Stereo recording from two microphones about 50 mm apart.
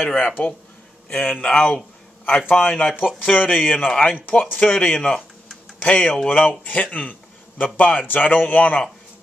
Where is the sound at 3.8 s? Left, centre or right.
Centre.